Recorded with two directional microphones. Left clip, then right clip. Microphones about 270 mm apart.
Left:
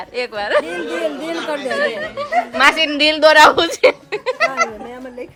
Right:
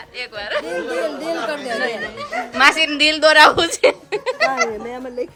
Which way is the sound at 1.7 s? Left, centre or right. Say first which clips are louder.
Left 4 dB; centre.